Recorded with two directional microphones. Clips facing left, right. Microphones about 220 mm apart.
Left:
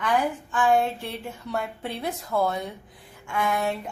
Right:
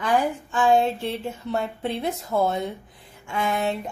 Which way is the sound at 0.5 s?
25° right (ahead or behind).